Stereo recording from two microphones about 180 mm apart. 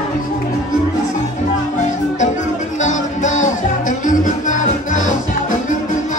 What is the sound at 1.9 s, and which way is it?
Music, 45° left (ahead or behind).